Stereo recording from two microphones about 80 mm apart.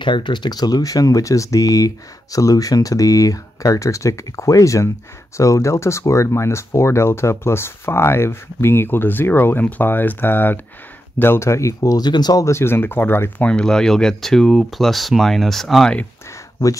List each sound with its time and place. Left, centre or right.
0.0 s speech: left
12.4 s speech: left
13.5 s speech: centre